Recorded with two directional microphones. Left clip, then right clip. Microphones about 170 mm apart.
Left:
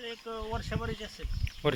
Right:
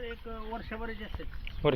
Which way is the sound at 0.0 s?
45° left (ahead or behind).